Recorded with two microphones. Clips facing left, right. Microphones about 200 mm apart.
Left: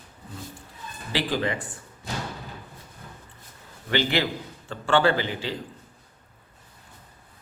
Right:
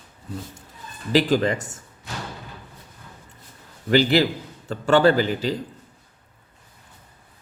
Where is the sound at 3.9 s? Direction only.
35° right (ahead or behind).